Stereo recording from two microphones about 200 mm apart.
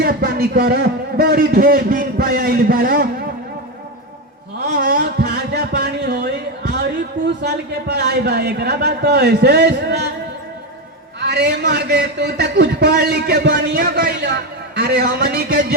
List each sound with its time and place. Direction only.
0.0 s a man's voice: 50° right (ahead or behind)
4.7 s a sound: 40° right (ahead or behind)
7.4 s a man's voice: 55° right (ahead or behind)
11.2 s a man's voice: 55° right (ahead or behind)